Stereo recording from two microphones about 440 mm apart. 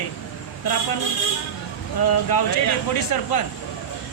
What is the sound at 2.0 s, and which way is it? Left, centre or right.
Speech, left.